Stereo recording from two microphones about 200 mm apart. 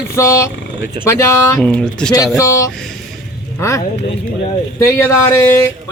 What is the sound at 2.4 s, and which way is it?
Speech, 15° left (ahead or behind).